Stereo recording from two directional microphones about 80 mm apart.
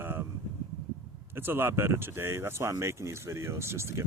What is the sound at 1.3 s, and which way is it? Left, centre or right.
Speech, right.